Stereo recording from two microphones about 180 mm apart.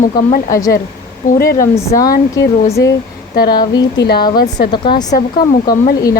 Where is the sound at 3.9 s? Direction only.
65° left (ahead or behind).